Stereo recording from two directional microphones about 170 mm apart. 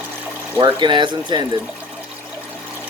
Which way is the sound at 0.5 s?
20° right (ahead or behind).